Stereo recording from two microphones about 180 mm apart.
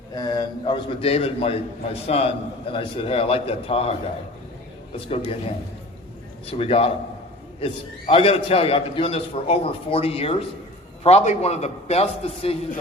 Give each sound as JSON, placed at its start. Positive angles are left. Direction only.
{"t": 0.1, "sound": "a man's voice", "side_deg": 20}
{"t": 4.9, "sound": "a man's voice", "side_deg": 35}
{"t": 6.4, "sound": "a man's voice", "side_deg": 30}